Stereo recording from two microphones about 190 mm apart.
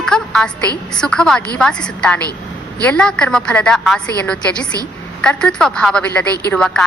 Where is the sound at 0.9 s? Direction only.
5° left (ahead or behind).